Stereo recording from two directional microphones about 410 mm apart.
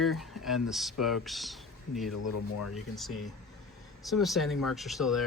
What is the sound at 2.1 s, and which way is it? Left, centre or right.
Speech, left.